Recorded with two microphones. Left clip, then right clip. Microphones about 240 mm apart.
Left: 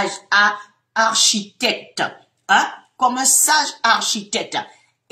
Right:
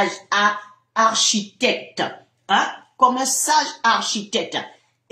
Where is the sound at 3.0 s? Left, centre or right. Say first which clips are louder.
Even; centre.